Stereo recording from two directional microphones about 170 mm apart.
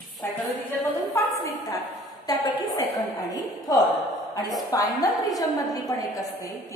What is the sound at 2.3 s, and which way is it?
A woman's voice, 20° left (ahead or behind).